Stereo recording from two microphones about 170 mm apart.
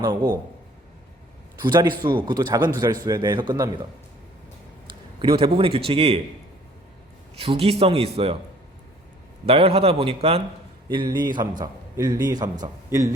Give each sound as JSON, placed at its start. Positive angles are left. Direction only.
{"t": 0.0, "sound": "a man's voice", "side_deg": -25}
{"t": 1.6, "sound": "a man's voice", "side_deg": -25}
{"t": 5.2, "sound": "a man's voice", "side_deg": -30}
{"t": 7.3, "sound": "a man's voice", "side_deg": -35}
{"t": 9.5, "sound": "a man's voice", "side_deg": -35}